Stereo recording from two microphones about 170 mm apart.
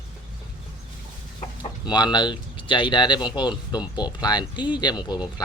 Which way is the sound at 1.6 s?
25° left (ahead or behind).